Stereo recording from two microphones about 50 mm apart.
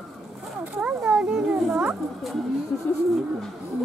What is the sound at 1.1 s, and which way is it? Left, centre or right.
Children playing, centre.